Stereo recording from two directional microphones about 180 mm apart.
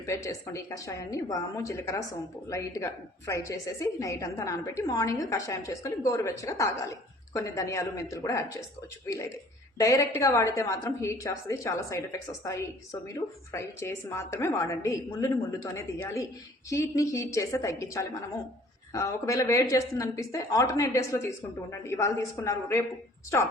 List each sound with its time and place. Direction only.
0.0 s a woman's voice: 15° left (ahead or behind)